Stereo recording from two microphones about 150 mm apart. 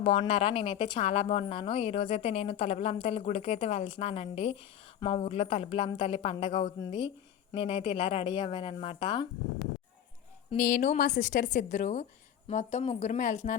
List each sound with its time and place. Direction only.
0.1 s a woman's voice: 40° left (ahead or behind)
10.6 s a woman's voice: 60° left (ahead or behind)